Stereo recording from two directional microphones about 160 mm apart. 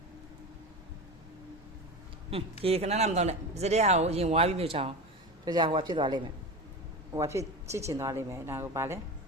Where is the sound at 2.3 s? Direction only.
40° right (ahead or behind).